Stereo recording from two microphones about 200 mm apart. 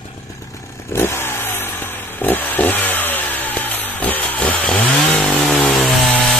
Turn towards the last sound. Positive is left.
turn(degrees=0)  # may be behind; listen again after turning